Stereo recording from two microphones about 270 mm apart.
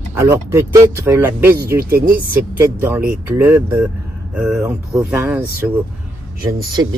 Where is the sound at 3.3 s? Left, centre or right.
Centre.